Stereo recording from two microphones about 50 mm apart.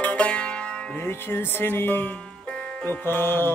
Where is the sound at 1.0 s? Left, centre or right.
Left.